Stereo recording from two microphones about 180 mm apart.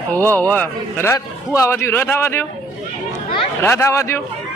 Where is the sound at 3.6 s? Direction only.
15° left (ahead or behind).